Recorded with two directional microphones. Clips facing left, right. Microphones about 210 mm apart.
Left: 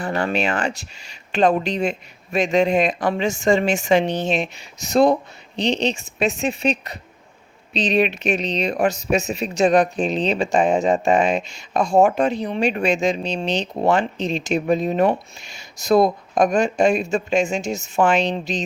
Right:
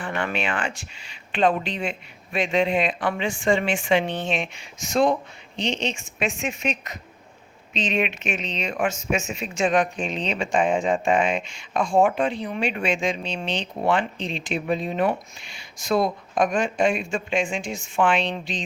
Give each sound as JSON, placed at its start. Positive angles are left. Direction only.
{"t": 0.0, "sound": "speech", "side_deg": 35}